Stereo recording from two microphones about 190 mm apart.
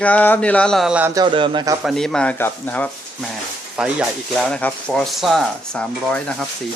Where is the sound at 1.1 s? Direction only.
25° right (ahead or behind).